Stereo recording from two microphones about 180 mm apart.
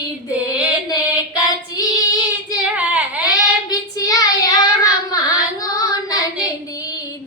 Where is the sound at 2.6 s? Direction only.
5° right (ahead or behind).